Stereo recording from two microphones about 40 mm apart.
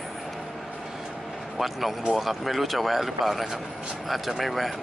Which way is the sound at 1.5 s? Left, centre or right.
Centre.